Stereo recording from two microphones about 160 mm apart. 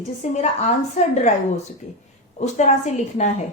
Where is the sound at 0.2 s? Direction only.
45° left (ahead or behind).